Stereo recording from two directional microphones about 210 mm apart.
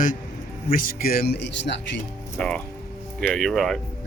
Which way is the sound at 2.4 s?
5° left (ahead or behind).